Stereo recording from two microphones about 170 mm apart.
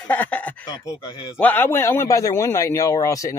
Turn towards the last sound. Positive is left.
turn(degrees=20)  # may be behind; listen again after turning